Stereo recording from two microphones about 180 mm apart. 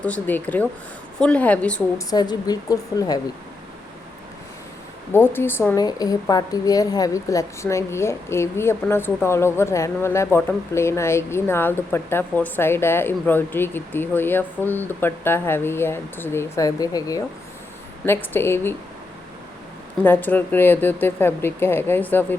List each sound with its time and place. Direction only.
0.0 s a woman's voice: 10° left (ahead or behind)
2.0 s a woman's voice: 20° left (ahead or behind)
5.1 s a woman's voice: 15° left (ahead or behind)
20.0 s a woman's voice: 10° left (ahead or behind)